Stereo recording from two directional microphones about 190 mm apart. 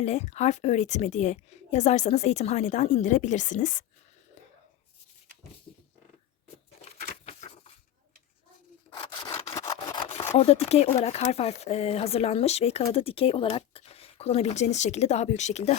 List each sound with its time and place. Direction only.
0.0 s a woman's voice: 35° left (ahead or behind)
6.8 s a sound: 40° left (ahead or behind)
9.0 s sawing: 25° left (ahead or behind)
10.3 s a woman's voice: 35° left (ahead or behind)